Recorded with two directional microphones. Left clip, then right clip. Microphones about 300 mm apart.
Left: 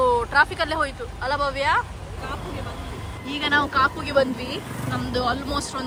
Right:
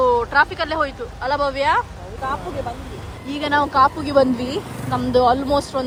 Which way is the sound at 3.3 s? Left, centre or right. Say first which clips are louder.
Right 2 dB; centre.